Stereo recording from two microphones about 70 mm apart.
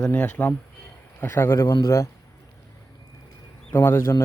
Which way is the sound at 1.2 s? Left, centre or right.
Left.